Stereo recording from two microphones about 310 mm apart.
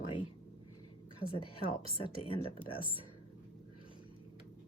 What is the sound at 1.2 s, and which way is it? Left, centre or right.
Speech, left.